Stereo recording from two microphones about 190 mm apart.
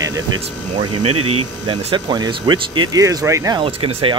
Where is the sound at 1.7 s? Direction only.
25° right (ahead or behind).